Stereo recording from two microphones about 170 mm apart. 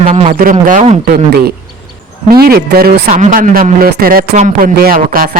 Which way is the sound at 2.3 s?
65° right (ahead or behind).